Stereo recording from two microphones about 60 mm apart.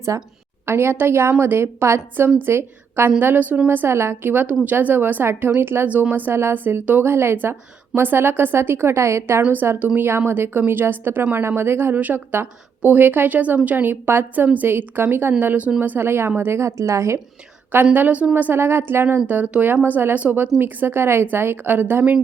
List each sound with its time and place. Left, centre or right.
0.1 s a woman's voice: right
0.6 s a woman's voice: right
3.2 s a woman's voice: right
3.8 s a woman's voice: right
4.2 s a woman's voice: right
6.3 s a woman's voice: right
9.4 s a woman's voice: right
10.1 s a woman's voice: right
16.5 s a woman's voice: right
17.9 s a woman's voice: right
20.1 s a woman's voice: right